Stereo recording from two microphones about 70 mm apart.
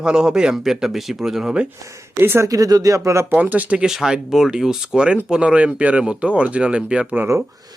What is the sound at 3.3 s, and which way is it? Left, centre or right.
Speech, right.